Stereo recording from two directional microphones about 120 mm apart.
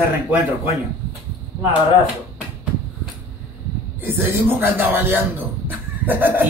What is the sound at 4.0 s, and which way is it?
Speech, 15° right (ahead or behind).